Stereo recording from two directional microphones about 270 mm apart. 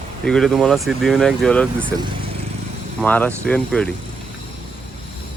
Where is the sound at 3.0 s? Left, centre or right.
Centre.